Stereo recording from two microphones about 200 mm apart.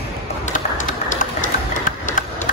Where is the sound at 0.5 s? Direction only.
40° left (ahead or behind).